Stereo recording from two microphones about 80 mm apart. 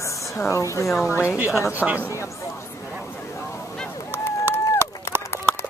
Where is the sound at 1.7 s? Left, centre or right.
Centre.